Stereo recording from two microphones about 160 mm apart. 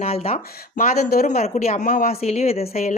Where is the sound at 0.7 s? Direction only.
65° left (ahead or behind).